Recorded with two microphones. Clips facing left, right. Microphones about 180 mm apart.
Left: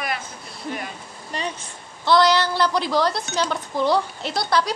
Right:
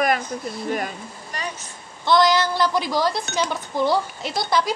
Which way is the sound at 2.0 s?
Centre (ahead or behind).